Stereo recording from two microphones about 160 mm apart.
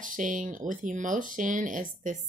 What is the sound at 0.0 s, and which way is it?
Speech, 55° right (ahead or behind).